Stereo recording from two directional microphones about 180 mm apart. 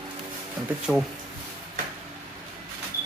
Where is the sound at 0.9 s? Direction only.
5° right (ahead or behind).